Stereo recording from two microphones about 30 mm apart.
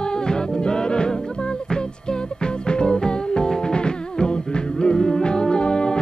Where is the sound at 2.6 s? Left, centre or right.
Left.